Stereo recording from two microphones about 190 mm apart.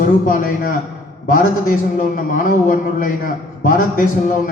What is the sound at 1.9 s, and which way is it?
A man's voice, 45° left (ahead or behind).